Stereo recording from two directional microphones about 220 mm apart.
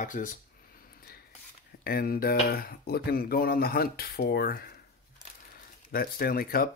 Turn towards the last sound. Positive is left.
turn(degrees=40)  # may be behind; listen again after turning